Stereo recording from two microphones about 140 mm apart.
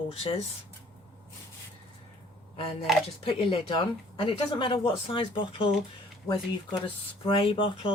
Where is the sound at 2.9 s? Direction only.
Centre (ahead or behind).